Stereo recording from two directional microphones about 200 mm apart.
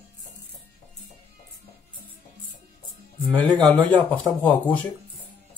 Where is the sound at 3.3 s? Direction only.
5° left (ahead or behind).